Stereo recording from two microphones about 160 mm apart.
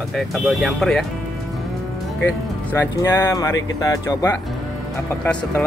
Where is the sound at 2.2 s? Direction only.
15° left (ahead or behind).